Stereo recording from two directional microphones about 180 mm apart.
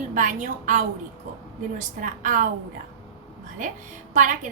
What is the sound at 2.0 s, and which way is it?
Speech, 45° right (ahead or behind).